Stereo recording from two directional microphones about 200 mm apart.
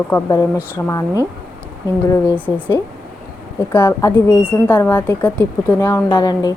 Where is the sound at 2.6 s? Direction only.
10° left (ahead or behind).